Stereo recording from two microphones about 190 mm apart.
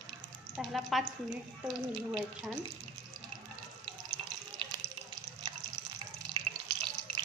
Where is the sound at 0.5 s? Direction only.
Centre (ahead or behind).